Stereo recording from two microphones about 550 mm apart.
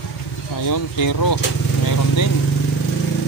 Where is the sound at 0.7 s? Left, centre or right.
Left.